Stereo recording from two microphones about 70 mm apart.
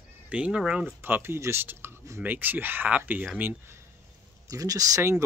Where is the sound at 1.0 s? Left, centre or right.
Right.